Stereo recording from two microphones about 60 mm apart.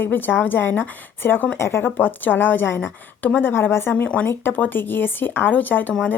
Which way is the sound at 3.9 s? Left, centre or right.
Left.